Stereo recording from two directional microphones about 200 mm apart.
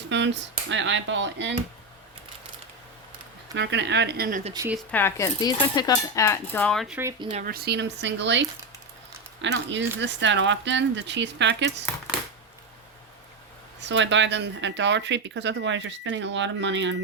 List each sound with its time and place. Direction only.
0.1 s speech: 65° right (ahead or behind)
3.5 s speech: 60° right (ahead or behind); by 4.5 s 40° right (ahead or behind)
4.9 s speech: 10° left (ahead or behind)
7.3 s speech: 40° right (ahead or behind); by 11.7 s 60° right (ahead or behind)
13.8 s speech: 65° right (ahead or behind)